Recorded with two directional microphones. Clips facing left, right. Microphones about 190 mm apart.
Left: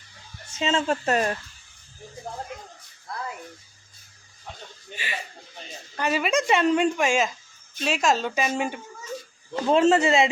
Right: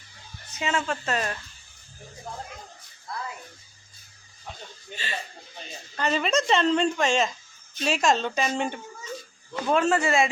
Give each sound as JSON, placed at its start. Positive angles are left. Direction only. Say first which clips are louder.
{"t": 0.5, "sound": "speech", "louder": "left 3 dB", "side_deg": 25}
{"t": 0.9, "sound": "speech", "louder": "left 5 dB", "side_deg": 40}
{"t": 4.9, "sound": "a woman's voice", "louder": "even", "side_deg": 15}
{"t": 7.8, "sound": "speech", "louder": "even", "side_deg": 0}
{"t": 9.6, "sound": "a man's voice", "louder": "left 4 dB", "side_deg": 25}